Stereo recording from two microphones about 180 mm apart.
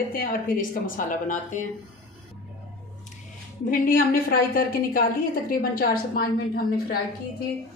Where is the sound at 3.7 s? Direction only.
50° left (ahead or behind).